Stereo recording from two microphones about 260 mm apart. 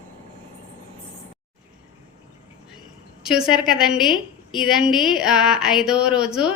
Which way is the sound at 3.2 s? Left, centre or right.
Centre.